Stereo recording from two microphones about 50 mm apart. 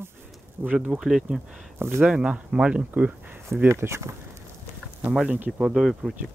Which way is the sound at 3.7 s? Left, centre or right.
Right.